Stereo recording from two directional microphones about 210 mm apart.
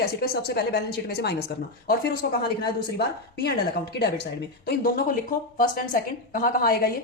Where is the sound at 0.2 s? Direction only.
50° left (ahead or behind).